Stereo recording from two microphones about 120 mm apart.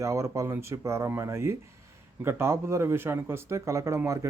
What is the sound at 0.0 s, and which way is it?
Speech, 25° right (ahead or behind).